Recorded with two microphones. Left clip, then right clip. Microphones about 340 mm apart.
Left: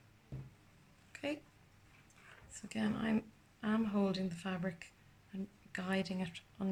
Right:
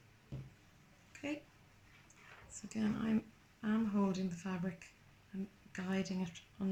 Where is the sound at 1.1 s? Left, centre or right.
Left.